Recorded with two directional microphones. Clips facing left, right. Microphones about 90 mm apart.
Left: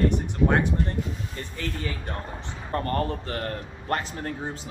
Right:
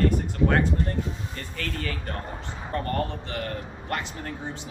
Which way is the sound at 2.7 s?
35° left (ahead or behind).